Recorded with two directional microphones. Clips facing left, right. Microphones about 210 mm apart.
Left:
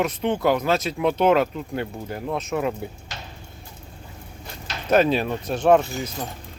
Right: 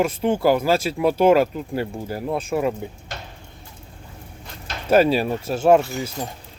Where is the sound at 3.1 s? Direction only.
55° right (ahead or behind).